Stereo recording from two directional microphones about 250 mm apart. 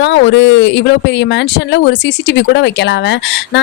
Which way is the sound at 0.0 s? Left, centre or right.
Left.